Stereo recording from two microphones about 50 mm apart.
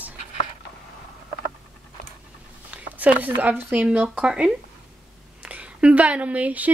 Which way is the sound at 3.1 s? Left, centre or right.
Right.